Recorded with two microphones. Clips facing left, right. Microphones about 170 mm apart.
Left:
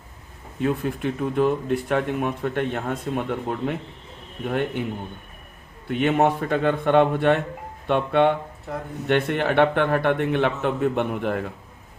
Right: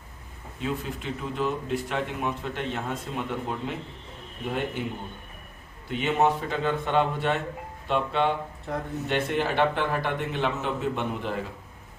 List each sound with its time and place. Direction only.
0.6 s speech: 55° left (ahead or behind)
5.9 s speech: 55° left (ahead or behind)